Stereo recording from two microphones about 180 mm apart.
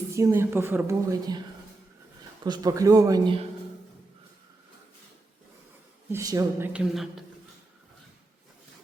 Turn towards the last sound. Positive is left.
turn(degrees=-5)  # may be behind; listen again after turning